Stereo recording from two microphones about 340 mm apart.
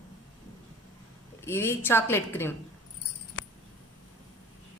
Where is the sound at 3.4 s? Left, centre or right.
Left.